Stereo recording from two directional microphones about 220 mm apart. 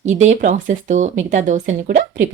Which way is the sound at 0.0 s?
30° right (ahead or behind).